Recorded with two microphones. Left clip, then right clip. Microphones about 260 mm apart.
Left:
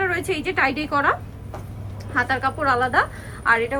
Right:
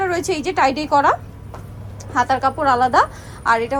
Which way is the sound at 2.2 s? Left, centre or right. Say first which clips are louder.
Right 4 dB; centre.